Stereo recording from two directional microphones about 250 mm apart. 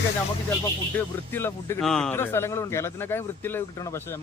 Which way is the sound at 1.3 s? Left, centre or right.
Centre.